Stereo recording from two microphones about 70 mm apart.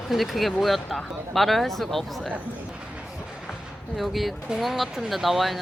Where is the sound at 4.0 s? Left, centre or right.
Centre.